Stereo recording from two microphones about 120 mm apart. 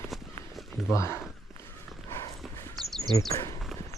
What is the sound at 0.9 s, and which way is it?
Speech, 25° left (ahead or behind).